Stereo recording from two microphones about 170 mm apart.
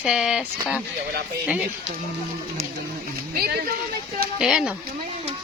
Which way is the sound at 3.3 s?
65° right (ahead or behind).